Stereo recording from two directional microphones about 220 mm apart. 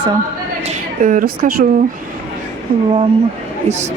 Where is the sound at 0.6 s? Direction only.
40° right (ahead or behind).